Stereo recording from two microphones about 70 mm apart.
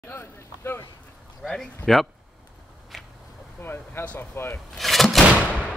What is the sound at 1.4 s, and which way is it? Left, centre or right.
Speech, centre.